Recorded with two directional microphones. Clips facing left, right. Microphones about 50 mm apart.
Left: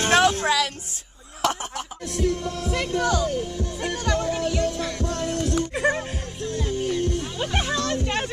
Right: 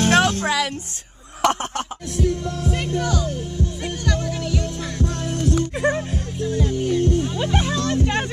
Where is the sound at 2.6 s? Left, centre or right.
Right.